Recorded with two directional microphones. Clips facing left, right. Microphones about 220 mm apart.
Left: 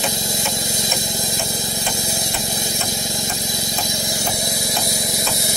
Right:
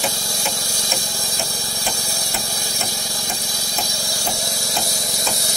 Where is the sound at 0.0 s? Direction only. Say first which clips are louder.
Left 2 dB; 20° left (ahead or behind).